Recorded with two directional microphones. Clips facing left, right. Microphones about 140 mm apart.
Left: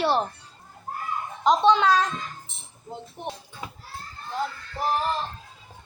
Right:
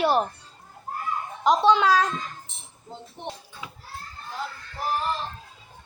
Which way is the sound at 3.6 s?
45° left (ahead or behind).